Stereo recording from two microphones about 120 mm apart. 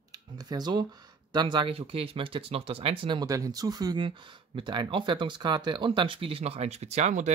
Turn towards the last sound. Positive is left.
turn(degrees=-75)  # may be behind; listen again after turning